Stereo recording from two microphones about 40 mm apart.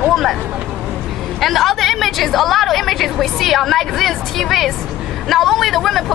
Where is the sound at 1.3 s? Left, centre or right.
Centre.